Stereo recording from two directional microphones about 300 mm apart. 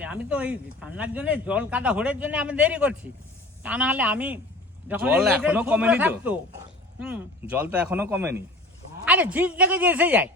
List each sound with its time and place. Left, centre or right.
0.0 s speech: centre